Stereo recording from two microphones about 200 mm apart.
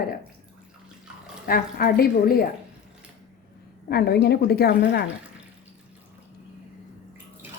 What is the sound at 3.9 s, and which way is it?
A woman's voice, 55° left (ahead or behind).